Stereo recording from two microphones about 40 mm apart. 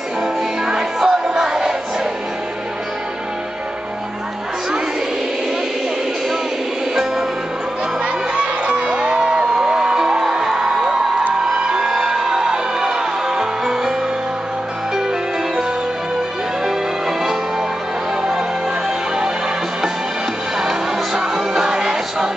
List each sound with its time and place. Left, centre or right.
0.2 s music: centre
8.0 s crowd: right
10.2 s music: centre
17.2 s music: centre
20.5 s music: centre